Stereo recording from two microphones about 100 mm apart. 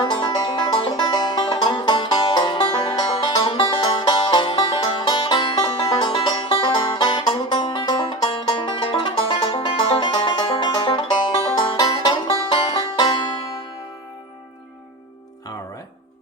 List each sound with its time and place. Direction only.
0.0 s music: 55° left (ahead or behind)
1.5 s music: 60° left (ahead or behind)